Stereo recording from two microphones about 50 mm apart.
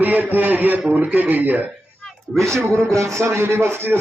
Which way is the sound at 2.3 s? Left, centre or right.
Centre.